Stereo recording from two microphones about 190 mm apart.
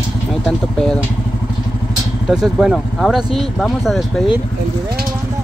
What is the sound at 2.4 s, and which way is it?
Speech, centre (ahead or behind).